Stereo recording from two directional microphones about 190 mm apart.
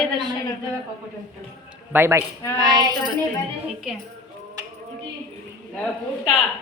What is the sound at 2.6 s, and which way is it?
Music, 20° right (ahead or behind).